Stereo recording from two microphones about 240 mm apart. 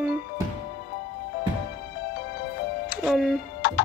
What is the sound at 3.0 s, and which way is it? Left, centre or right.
Speech, centre.